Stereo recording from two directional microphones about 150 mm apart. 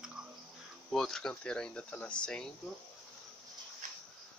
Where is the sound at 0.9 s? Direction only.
Centre (ahead or behind).